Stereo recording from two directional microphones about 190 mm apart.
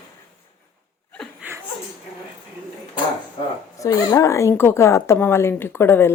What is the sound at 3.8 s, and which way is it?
A woman's voice, 20° left (ahead or behind).